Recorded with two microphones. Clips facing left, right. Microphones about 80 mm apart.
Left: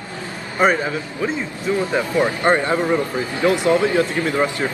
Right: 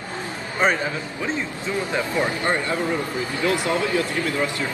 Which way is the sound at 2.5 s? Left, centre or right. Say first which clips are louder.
Left 9 dB; left.